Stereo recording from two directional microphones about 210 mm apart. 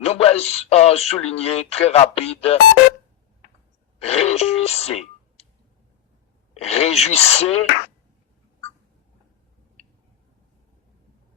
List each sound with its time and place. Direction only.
0.0 s speech: 30° left (ahead or behind)
4.0 s speech: 30° left (ahead or behind)
6.6 s speech: 30° left (ahead or behind)